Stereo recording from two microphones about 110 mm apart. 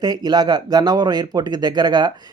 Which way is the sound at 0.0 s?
40° right (ahead or behind).